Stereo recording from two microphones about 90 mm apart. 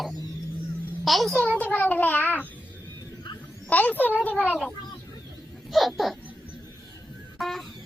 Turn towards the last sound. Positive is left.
turn(degrees=0)  # may be behind; listen again after turning